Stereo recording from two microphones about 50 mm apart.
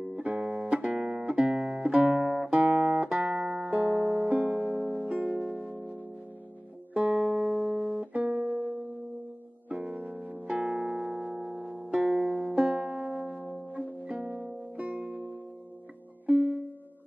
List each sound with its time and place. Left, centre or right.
0.2 s music: right
2.2 s music: centre
2.5 s guitar: right
4.1 s music: right
7.2 s music: centre
7.4 s music: centre
8.0 s music: right
10.4 s music: centre
13.1 s music: centre
13.4 s music: right
16.3 s music: right